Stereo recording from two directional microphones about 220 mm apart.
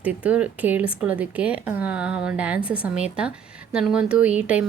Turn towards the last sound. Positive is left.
turn(degrees=-5)  # may be behind; listen again after turning